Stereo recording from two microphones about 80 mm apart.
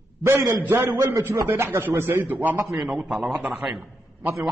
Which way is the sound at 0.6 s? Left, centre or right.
Right.